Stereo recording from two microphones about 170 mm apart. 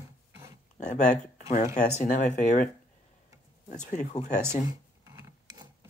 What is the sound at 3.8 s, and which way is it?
Speech, 45° left (ahead or behind).